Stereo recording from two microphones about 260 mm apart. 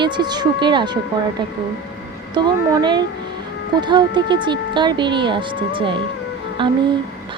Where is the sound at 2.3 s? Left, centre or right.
Centre.